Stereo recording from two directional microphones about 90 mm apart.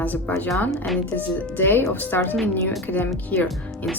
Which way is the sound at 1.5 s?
25° left (ahead or behind).